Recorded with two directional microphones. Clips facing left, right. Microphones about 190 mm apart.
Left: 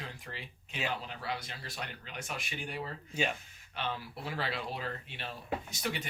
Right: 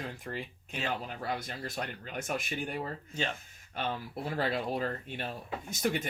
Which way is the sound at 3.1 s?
10° left (ahead or behind).